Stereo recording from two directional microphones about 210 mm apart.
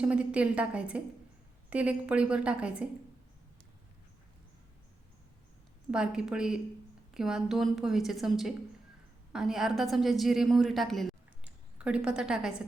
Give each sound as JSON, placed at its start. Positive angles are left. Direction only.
{"t": 0.0, "sound": "a woman's voice", "side_deg": -5}
{"t": 5.9, "sound": "a woman's voice", "side_deg": -5}